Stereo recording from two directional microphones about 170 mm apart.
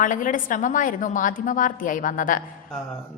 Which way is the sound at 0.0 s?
50° left (ahead or behind).